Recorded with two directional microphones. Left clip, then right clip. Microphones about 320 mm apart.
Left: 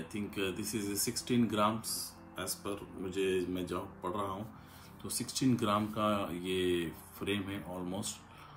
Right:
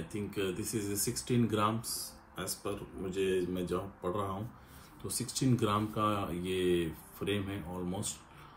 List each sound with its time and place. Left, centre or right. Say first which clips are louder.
0.1 s speech: right 1 dB; centre